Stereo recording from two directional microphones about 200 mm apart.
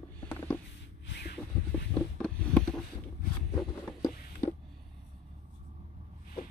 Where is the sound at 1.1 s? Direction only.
55° left (ahead or behind).